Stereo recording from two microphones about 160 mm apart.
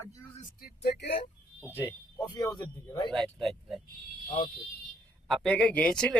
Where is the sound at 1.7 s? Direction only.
15° left (ahead or behind).